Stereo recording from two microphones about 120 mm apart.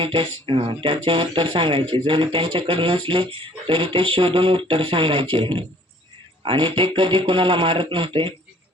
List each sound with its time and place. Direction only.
0.0 s speech: 50° right (ahead or behind)